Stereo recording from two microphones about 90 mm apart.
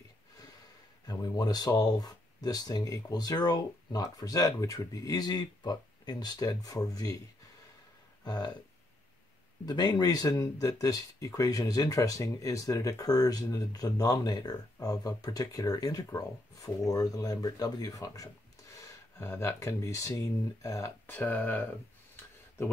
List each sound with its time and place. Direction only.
1.2 s speech: 50° left (ahead or behind)
8.2 s burping: 50° left (ahead or behind)
9.7 s speech: 45° left (ahead or behind)
19.1 s speech: 30° left (ahead or behind)
21.1 s speech: 20° left (ahead or behind)